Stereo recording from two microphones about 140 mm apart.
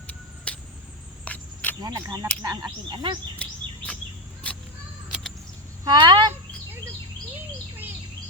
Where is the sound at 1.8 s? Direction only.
30° right (ahead or behind).